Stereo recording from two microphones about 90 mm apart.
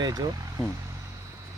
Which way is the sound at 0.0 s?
50° right (ahead or behind).